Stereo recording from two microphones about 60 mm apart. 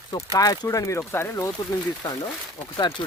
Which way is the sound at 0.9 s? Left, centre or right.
Left.